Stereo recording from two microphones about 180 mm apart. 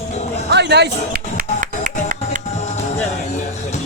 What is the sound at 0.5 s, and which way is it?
Music, 70° right (ahead or behind).